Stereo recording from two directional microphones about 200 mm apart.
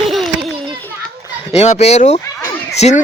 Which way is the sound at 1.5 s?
30° left (ahead or behind).